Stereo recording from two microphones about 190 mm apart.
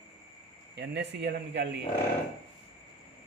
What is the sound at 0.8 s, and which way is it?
Speech, 65° right (ahead or behind).